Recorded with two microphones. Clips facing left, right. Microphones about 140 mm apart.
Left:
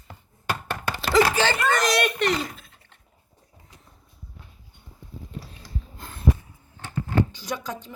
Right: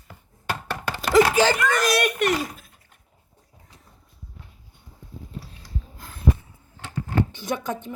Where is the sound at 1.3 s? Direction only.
10° right (ahead or behind).